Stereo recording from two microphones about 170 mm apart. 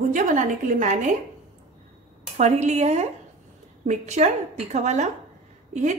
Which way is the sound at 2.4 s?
40° right (ahead or behind).